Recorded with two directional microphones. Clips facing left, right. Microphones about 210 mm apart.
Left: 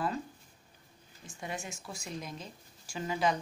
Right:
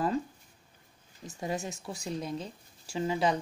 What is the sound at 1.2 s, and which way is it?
Speech, 35° right (ahead or behind).